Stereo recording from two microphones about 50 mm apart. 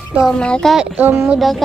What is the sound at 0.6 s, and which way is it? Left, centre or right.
Speech, centre.